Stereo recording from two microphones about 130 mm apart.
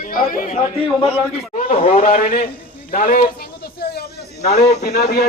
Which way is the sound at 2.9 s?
90° left.